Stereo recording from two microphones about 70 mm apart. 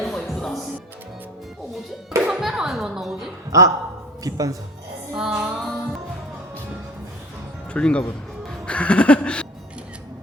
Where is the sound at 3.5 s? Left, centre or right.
Right.